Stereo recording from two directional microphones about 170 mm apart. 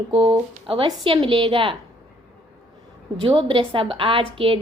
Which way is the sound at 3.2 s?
30° right (ahead or behind).